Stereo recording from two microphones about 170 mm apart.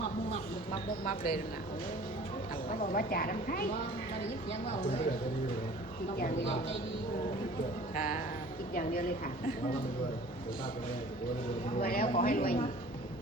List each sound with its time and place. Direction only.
1.0 s a woman's voice: 60° left (ahead or behind)
2.6 s a woman's voice: 55° left (ahead or behind)
7.9 s a woman's voice: 55° left (ahead or behind)
11.8 s a woman's voice: 55° left (ahead or behind)